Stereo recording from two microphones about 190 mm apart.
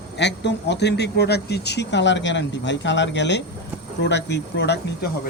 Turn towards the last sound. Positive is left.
turn(degrees=65)  # may be behind; listen again after turning